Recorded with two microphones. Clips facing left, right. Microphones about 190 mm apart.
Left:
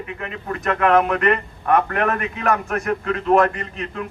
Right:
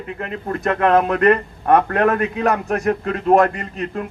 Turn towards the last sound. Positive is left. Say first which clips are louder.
# right 3 dB
turn(degrees=-40)  # may be behind; listen again after turning